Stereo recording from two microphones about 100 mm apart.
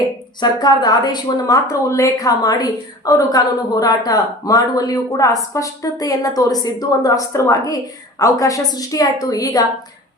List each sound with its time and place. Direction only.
0.3 s a woman's voice: 45° left (ahead or behind)